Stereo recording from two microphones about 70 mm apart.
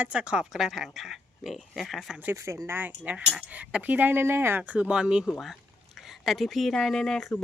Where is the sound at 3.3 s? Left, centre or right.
Centre; by 4.6 s right.